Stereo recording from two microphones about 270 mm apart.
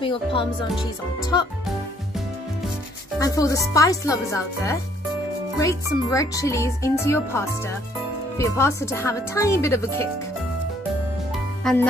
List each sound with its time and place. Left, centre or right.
0.0 s speech: centre
3.2 s speech: centre
5.9 s speech: centre
11.6 s music: centre